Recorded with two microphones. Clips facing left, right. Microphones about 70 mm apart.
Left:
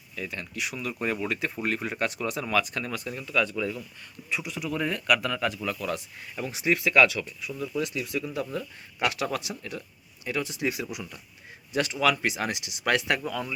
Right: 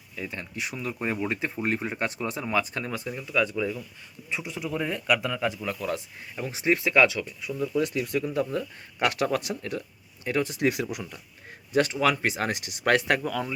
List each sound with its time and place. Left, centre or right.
0.2 s speech: right
7.8 s speech: right
11.7 s speech: right